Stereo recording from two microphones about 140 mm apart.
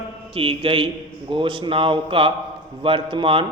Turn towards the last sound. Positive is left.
turn(degrees=-35)  # may be behind; listen again after turning